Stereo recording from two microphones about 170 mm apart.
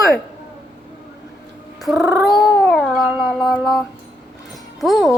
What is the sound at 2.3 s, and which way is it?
Cat, centre (ahead or behind).